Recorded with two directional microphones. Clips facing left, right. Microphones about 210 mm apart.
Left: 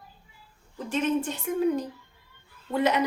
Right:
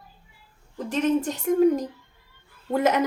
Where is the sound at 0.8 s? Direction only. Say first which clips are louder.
Right 3 dB; 40° right (ahead or behind).